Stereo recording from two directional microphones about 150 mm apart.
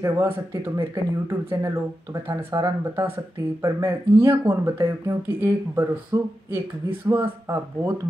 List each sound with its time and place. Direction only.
0.0 s speech: 20° right (ahead or behind)